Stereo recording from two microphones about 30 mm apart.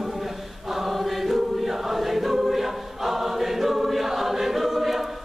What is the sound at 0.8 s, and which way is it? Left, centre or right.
Choir, centre.